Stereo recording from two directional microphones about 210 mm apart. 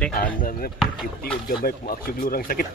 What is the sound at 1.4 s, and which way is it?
Speech, 45° left (ahead or behind).